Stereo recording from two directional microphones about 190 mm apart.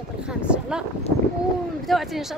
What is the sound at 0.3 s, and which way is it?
Speech, 5° right (ahead or behind).